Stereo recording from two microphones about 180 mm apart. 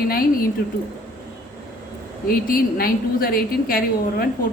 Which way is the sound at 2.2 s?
55° left (ahead or behind).